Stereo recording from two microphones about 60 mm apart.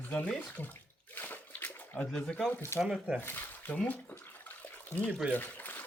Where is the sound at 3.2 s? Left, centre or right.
Left.